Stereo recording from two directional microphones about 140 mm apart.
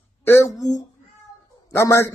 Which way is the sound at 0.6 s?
25° left (ahead or behind).